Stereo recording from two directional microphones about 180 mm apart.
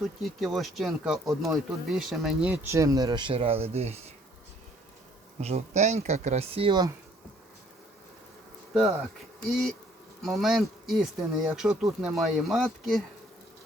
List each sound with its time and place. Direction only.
0.0 s speech: centre (ahead or behind); by 4.1 s 35° right (ahead or behind)
5.4 s speech: 35° right (ahead or behind)
9.4 s speech: centre (ahead or behind)